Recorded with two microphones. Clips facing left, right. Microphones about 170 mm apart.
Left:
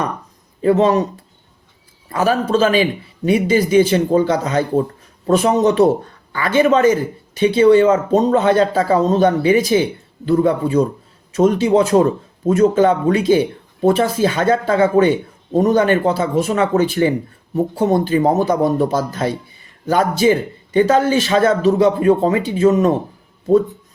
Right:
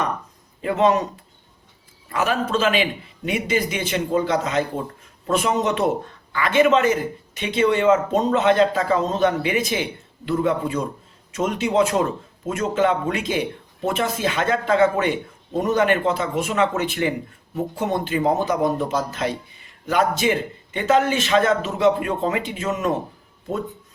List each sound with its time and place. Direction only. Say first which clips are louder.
0.6 s speech: left 5 dB; 35° left (ahead or behind)
2.1 s speech: left 6 dB; 35° left (ahead or behind)